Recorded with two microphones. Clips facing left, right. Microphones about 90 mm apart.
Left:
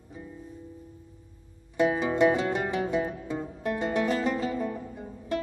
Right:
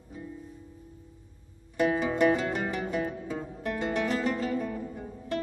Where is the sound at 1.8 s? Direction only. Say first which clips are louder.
Left 2 dB; 10° left (ahead or behind).